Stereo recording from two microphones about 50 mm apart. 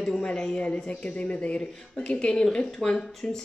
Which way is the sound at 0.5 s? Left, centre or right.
Left.